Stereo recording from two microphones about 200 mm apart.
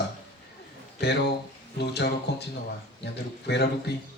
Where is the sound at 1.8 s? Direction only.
55° left (ahead or behind).